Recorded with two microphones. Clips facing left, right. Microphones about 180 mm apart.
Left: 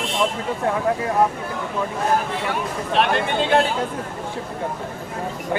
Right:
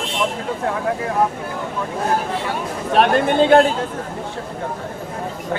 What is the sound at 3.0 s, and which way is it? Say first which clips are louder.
Speech: right 6 dB; 45° right (ahead or behind).